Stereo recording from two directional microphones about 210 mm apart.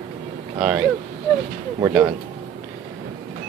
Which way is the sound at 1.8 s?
20° right (ahead or behind).